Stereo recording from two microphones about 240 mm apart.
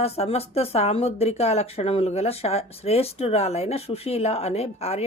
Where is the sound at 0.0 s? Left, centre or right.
Left.